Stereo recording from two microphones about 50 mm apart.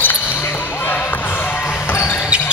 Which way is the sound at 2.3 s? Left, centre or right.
Right.